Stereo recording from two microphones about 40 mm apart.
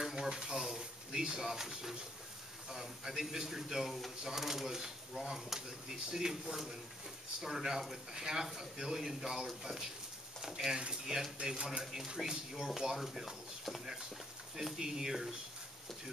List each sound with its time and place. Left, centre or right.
0.0 s a sound: centre
2.7 s a man's voice: centre
11.8 s a man's voice: centre
14.6 s a man's voice: centre